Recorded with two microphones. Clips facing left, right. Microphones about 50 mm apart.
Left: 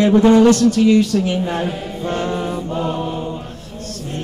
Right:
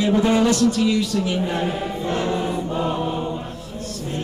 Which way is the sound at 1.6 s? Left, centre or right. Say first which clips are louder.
Left 1 dB; centre.